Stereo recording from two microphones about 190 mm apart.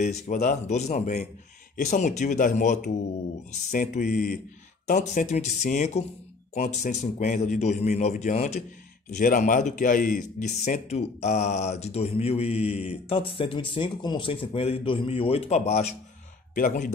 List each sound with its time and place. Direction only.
0.0 s a man's voice: 40° left (ahead or behind)
10.6 s a man's voice: 35° left (ahead or behind)